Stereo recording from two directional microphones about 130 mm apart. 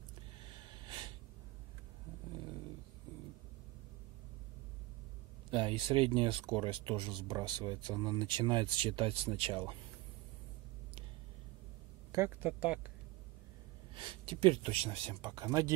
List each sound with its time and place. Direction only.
5.5 s speech: 40° right (ahead or behind)
12.4 s speech: 10° right (ahead or behind)
13.9 s speech: 40° right (ahead or behind)
15.3 s speech: 30° right (ahead or behind)